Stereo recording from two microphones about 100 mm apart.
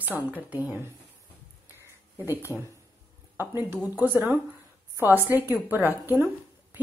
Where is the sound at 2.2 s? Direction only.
20° right (ahead or behind).